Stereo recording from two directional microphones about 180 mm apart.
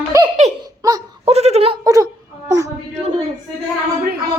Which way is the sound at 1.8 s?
20° right (ahead or behind).